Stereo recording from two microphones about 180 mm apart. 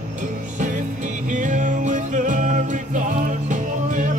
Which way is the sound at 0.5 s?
45° right (ahead or behind).